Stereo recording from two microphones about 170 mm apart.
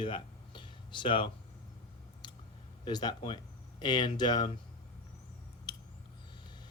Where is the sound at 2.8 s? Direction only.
25° left (ahead or behind).